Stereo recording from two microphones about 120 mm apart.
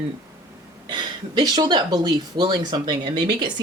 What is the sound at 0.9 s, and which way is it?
Speech, 40° right (ahead or behind).